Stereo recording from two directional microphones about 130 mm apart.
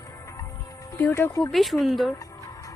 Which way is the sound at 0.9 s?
20° left (ahead or behind).